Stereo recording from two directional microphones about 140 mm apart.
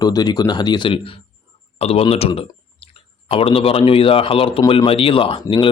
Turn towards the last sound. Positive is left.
turn(degrees=40)  # may be behind; listen again after turning